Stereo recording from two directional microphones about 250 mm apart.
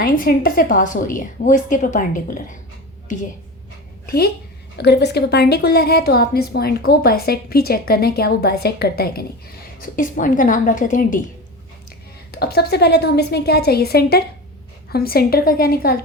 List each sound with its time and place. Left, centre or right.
0.0 s a woman's voice: left
4.0 s a woman's voice: left
12.3 s a woman's voice: left